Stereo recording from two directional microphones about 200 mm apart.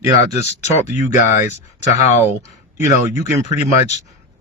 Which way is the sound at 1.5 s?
10° right (ahead or behind).